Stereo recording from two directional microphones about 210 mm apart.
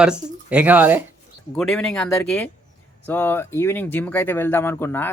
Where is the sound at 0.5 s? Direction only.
10° right (ahead or behind).